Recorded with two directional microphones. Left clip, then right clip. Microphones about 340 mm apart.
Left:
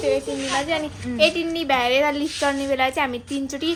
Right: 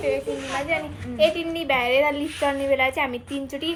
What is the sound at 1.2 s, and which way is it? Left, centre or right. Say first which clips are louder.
A child's voice: left 1 dB; centre.